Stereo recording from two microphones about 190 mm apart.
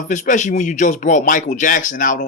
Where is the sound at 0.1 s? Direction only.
40° left (ahead or behind).